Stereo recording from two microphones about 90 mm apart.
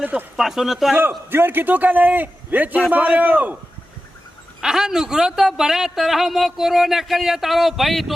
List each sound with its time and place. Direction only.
0.0 s a man's voice: 20° right (ahead or behind)
0.3 s a man's voice: 5° right (ahead or behind)
1.3 s a man's voice: 25° right (ahead or behind)
4.6 s a man's voice: 5° right (ahead or behind)